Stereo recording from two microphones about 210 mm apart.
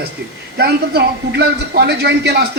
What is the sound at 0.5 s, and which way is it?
A man's voice, 50° right (ahead or behind).